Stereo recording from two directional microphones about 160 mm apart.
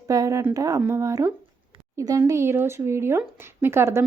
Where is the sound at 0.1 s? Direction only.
20° right (ahead or behind).